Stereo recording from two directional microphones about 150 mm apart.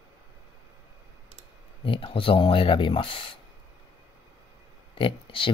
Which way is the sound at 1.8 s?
35° left (ahead or behind).